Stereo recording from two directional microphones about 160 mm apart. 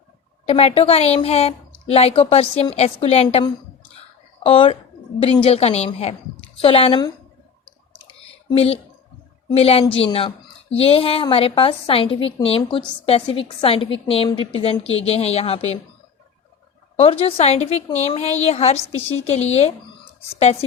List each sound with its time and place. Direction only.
0.4 s a woman's voice: 40° left (ahead or behind)
4.4 s a woman's voice: 35° left (ahead or behind)
8.5 s a woman's voice: 40° left (ahead or behind)
17.0 s a woman's voice: 40° left (ahead or behind)